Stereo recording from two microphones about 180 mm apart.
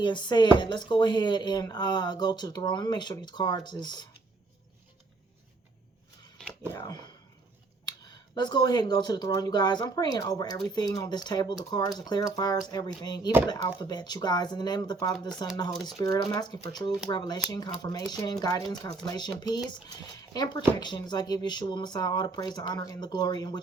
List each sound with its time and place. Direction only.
0.0 s speech: 25° left (ahead or behind)
6.4 s a sound: 5° left (ahead or behind)
6.7 s speech: 20° left (ahead or behind)
8.4 s speech: 25° left (ahead or behind)